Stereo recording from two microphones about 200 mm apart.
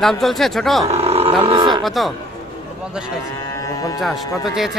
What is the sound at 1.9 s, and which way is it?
Speech, centre (ahead or behind).